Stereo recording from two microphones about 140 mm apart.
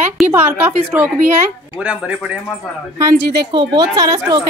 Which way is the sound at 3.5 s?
30° right (ahead or behind).